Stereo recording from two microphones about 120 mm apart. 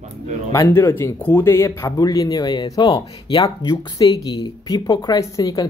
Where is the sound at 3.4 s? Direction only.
25° left (ahead or behind).